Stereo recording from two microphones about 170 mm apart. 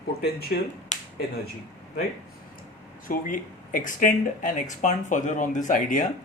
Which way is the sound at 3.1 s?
50° left (ahead or behind).